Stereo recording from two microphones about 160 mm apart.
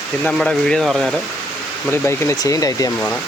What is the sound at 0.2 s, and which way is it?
Speech, 5° left (ahead or behind).